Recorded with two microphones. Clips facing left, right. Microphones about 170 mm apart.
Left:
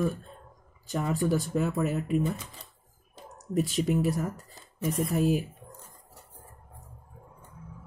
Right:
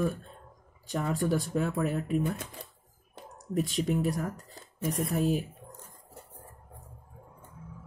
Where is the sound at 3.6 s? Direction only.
5° left (ahead or behind).